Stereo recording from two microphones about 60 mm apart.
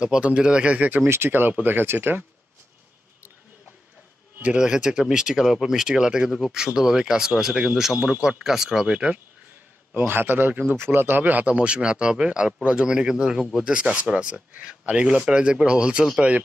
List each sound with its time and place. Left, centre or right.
0.0 s speech: centre
1.0 s a man's voice: right
4.6 s speech: centre
8.9 s speech: centre
9.9 s a man's voice: right